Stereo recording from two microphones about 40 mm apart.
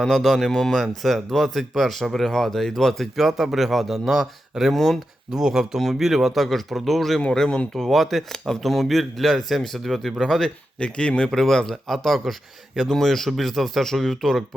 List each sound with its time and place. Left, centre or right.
0.0 s speech: centre
3.2 s speech: centre
5.3 s speech: centre
6.4 s speech: centre
7.3 s speech: centre
7.7 s speech: centre
8.3 s speech: centre
10.8 s speech: left
11.3 s speech: centre
12.9 s speech: centre